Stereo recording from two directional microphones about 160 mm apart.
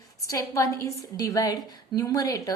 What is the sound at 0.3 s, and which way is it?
A woman's voice, 20° left (ahead or behind).